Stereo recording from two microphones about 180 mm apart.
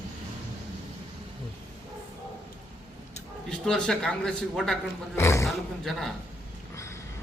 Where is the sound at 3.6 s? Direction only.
5° left (ahead or behind).